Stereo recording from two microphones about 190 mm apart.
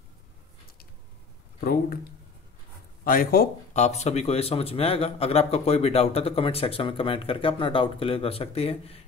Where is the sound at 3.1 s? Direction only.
50° left (ahead or behind).